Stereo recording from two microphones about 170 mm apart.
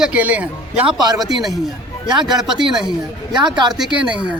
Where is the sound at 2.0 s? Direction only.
25° right (ahead or behind).